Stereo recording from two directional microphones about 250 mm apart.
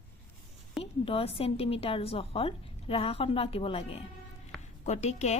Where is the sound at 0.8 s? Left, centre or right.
Left.